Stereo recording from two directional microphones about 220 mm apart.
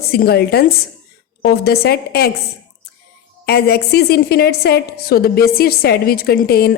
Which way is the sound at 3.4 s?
45° left (ahead or behind).